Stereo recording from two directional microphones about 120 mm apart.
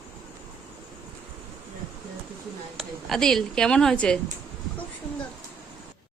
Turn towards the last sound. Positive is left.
turn(degrees=5)  # may be behind; listen again after turning